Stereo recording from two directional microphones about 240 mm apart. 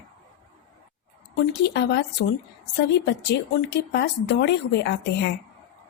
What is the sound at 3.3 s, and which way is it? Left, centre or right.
Speech, left.